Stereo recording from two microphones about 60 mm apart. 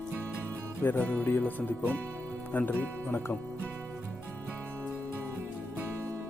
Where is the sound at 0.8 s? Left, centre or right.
Left.